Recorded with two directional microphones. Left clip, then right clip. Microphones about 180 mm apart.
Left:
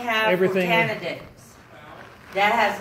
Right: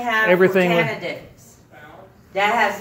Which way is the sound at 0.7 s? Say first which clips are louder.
Right 1 dB; centre (ahead or behind).